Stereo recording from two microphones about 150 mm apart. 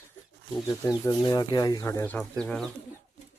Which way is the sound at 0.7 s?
20° left (ahead or behind).